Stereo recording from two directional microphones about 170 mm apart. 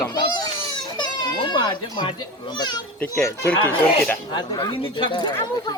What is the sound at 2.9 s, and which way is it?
Speech, 10° left (ahead or behind).